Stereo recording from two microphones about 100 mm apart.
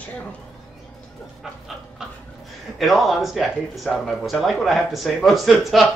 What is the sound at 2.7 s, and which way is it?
Speech, centre (ahead or behind).